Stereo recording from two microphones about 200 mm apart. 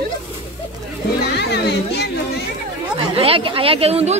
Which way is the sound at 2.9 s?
25° right (ahead or behind).